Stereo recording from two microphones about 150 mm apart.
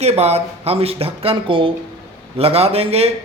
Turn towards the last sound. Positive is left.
turn(degrees=-40)  # may be behind; listen again after turning